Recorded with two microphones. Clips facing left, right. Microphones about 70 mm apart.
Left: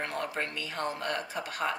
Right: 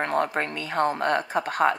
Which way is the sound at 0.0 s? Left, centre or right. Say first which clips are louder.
Right 9 dB; right.